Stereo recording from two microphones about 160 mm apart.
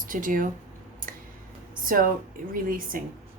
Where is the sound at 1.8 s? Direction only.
60° right (ahead or behind).